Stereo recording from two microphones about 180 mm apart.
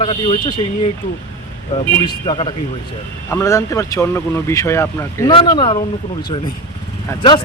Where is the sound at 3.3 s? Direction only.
15° left (ahead or behind).